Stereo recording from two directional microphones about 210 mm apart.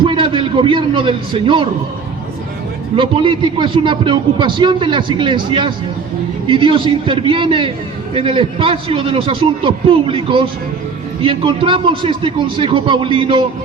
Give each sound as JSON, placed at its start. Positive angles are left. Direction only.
{"t": 0.0, "sound": "a man's voice", "side_deg": -25}
{"t": 2.9, "sound": "a man's voice", "side_deg": -25}